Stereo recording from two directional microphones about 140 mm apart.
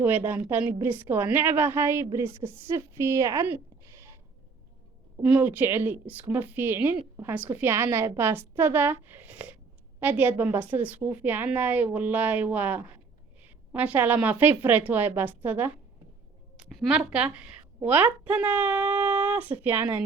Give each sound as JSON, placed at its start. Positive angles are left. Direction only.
{"t": 0.3, "sound": "a woman's voice", "side_deg": -15}
{"t": 5.2, "sound": "a woman's voice", "side_deg": -10}
{"t": 16.6, "sound": "a woman's voice", "side_deg": -5}